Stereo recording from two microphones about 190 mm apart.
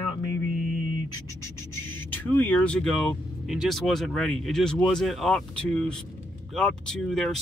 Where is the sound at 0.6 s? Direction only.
45° right (ahead or behind).